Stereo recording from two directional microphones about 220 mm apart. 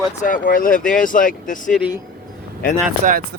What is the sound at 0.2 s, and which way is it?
Speech, 40° left (ahead or behind).